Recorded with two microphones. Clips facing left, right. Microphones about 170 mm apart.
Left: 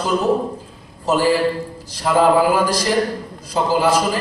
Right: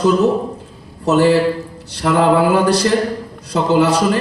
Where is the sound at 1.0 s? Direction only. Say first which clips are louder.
Right 4 dB; 70° right (ahead or behind).